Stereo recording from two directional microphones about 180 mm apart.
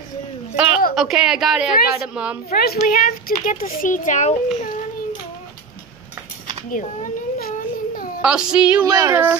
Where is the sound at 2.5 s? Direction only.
55° left (ahead or behind).